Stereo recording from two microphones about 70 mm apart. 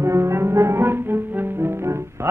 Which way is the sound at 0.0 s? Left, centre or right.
Right.